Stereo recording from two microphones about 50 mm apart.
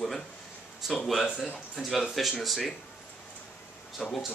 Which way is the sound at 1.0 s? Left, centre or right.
Centre.